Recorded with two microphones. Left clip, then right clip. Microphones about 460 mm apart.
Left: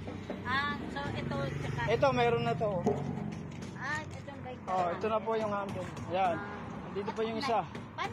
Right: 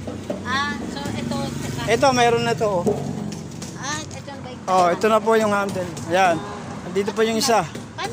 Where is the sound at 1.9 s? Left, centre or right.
Left.